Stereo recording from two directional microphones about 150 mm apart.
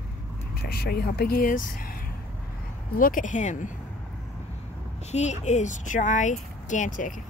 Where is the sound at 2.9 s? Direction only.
65° left (ahead or behind).